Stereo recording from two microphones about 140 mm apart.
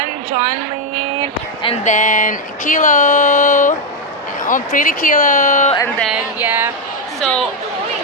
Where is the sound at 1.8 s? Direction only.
60° left (ahead or behind).